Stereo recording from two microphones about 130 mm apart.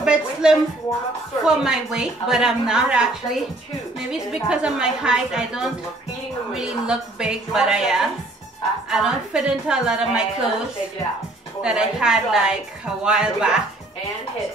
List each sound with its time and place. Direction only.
0.0 s a woman's voice: 5° right (ahead or behind)
11.6 s a woman's voice: 5° right (ahead or behind)